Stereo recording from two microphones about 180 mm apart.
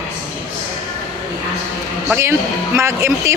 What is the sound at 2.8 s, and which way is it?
Speech, 15° right (ahead or behind).